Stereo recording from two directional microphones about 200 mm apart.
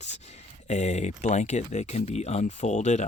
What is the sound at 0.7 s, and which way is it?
Speech, 35° left (ahead or behind).